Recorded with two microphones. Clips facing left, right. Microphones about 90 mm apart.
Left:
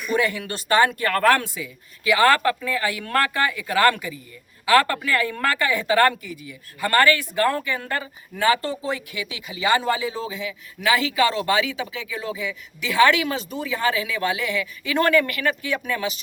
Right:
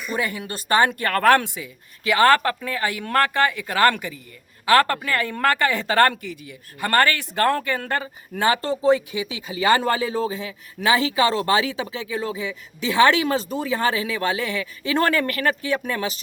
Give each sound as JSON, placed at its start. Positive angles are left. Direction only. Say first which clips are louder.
{"t": 0.9, "sound": "speech", "louder": "right 2 dB", "side_deg": -40}